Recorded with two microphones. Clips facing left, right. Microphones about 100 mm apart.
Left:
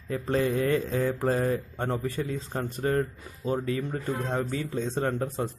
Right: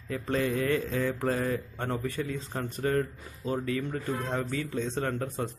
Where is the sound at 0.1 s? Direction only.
30° left (ahead or behind).